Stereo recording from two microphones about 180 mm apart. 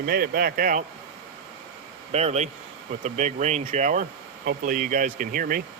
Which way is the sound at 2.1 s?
40° right (ahead or behind).